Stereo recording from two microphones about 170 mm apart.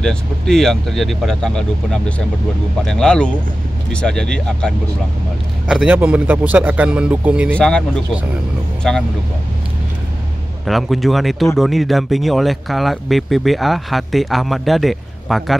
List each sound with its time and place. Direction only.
0.0 s speech: 5° left (ahead or behind)
5.7 s speech: 5° right (ahead or behind)
7.5 s speech: 5° left (ahead or behind)
10.6 s speech: centre (ahead or behind)